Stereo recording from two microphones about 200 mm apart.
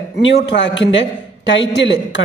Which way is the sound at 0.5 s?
65° left (ahead or behind).